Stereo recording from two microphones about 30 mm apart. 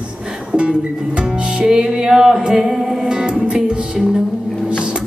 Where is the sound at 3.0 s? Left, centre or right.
Right.